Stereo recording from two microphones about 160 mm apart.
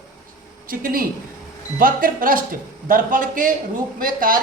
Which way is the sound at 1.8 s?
60° right (ahead or behind).